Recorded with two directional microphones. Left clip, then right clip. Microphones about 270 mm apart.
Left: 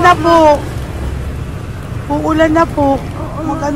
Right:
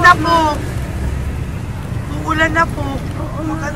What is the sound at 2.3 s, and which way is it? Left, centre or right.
Speech, centre.